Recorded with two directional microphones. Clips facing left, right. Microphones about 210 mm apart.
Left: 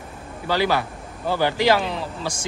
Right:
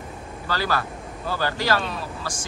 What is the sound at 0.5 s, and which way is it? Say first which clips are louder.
Speech: left 5 dB; 15° left (ahead or behind).